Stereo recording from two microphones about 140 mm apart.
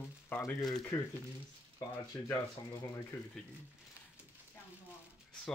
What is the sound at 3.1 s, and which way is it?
Speech, 20° left (ahead or behind).